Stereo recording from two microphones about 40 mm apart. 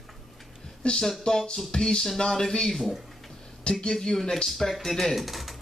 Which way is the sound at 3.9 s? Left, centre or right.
Centre.